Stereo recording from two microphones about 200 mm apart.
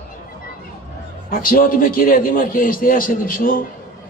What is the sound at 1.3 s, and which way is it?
A man's voice, 45° left (ahead or behind).